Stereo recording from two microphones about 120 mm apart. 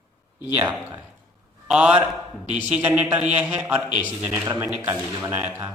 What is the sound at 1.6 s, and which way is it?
A man's voice, 5° right (ahead or behind).